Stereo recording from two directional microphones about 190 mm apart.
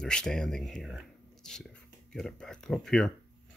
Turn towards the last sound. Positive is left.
turn(degrees=5)  # may be behind; listen again after turning